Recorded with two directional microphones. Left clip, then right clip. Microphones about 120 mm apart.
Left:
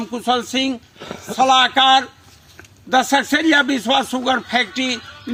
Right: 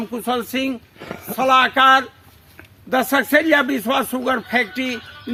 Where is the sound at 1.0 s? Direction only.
10° right (ahead or behind).